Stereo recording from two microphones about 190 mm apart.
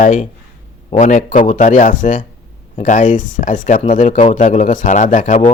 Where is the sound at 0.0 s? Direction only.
45° left (ahead or behind).